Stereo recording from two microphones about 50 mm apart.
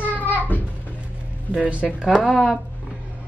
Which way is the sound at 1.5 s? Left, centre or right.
Right.